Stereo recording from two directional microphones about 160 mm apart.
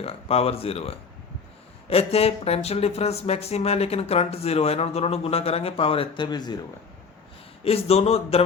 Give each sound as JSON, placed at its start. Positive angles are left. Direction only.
{"t": 0.0, "sound": "speech", "side_deg": 40}
{"t": 7.6, "sound": "speech", "side_deg": 35}